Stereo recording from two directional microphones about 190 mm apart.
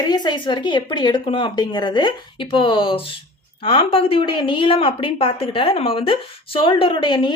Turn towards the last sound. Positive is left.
turn(degrees=25)  # may be behind; listen again after turning